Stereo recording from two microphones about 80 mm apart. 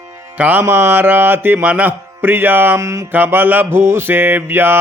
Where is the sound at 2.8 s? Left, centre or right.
Right.